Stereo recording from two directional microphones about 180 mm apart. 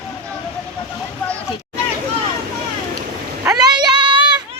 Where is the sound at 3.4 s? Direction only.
20° right (ahead or behind).